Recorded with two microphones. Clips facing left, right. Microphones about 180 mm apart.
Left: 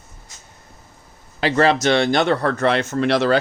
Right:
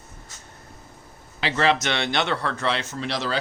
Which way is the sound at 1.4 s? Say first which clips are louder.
Left 5 dB; 45° left (ahead or behind).